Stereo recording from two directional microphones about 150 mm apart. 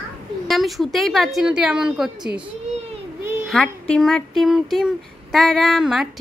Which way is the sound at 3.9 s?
5° left (ahead or behind).